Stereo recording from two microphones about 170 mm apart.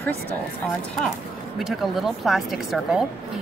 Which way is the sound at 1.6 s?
Centre (ahead or behind).